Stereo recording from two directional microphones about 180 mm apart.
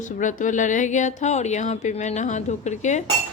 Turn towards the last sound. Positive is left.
turn(degrees=40)  # may be behind; listen again after turning